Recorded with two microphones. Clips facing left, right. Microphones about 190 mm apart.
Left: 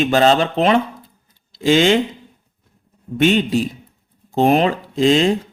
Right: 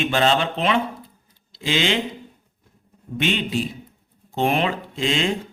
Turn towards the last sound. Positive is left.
turn(degrees=40)  # may be behind; listen again after turning